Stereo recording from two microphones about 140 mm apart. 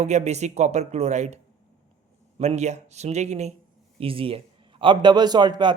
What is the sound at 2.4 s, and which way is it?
Speech, 55° right (ahead or behind).